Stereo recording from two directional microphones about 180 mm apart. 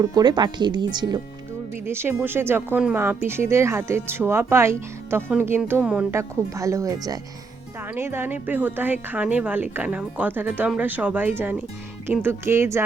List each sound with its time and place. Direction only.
0.0 s speech: 20° right (ahead or behind)
1.9 s speech: 15° right (ahead or behind)